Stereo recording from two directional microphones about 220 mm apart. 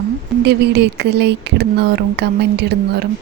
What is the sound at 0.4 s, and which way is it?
Speech, 50° right (ahead or behind).